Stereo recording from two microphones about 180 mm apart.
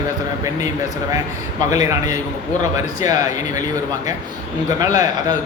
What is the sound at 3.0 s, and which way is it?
Speech, 20° right (ahead or behind).